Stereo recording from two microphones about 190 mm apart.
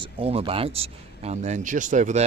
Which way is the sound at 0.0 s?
30° right (ahead or behind).